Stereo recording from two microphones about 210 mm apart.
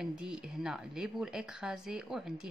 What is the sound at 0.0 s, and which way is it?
Speech, 5° right (ahead or behind).